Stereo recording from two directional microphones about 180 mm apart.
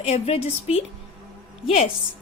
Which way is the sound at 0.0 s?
35° left (ahead or behind).